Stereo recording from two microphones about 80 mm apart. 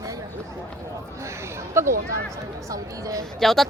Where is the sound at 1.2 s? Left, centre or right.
Right.